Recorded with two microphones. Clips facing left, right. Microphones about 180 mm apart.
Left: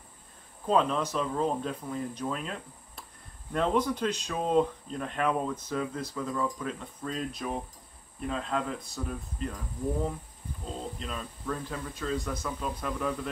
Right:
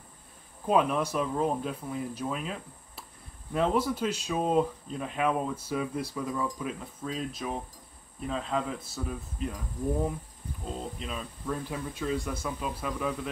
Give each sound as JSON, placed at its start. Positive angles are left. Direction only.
{"t": 0.7, "sound": "speech", "side_deg": -10}
{"t": 10.8, "sound": "speech", "side_deg": -5}